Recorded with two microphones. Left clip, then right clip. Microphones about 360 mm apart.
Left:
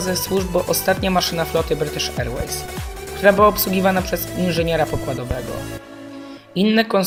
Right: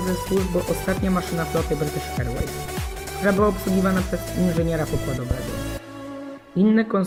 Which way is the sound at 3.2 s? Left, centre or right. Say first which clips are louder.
Left 7 dB; left.